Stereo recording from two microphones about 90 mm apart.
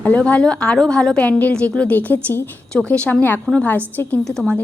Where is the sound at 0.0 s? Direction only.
15° left (ahead or behind).